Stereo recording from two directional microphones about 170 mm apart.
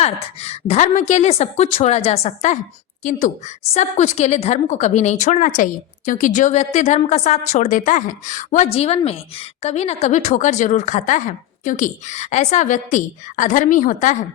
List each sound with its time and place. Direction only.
0.0 s a woman's voice: 40° left (ahead or behind)